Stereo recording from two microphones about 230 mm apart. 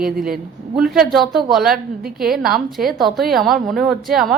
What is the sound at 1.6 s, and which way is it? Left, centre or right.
Speech, right.